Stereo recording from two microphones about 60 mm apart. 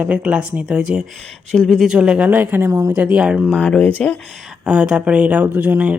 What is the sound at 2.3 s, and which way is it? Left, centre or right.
Speech, right.